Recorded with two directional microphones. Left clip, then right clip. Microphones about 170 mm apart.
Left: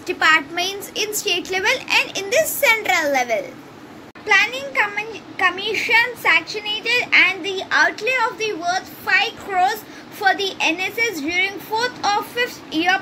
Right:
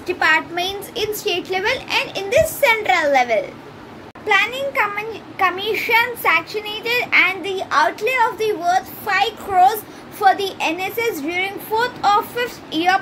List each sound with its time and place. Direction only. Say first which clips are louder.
0.0 s a child's voice: left 1 dB; centre (ahead or behind)